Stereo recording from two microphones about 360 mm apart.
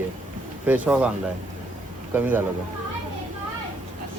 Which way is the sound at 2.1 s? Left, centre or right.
Centre.